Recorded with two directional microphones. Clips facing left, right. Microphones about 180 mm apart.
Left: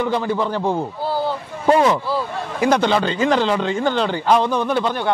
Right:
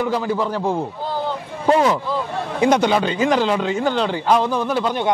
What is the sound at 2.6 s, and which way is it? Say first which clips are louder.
Speech: right 1 dB; 15° right (ahead or behind).